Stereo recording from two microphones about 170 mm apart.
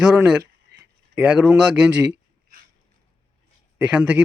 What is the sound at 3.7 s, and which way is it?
Speech, 10° right (ahead or behind).